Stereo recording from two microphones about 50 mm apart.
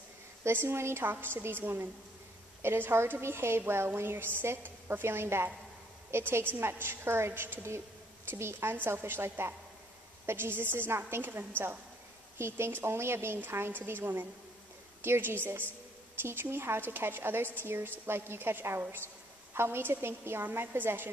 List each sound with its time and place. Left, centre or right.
0.4 s a woman's voice: right
20.4 s a woman's voice: right